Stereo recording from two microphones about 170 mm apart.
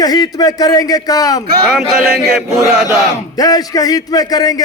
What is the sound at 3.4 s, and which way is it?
A man's voice, 20° left (ahead or behind).